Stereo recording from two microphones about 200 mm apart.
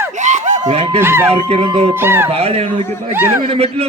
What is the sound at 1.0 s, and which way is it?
Speech, 10° right (ahead or behind).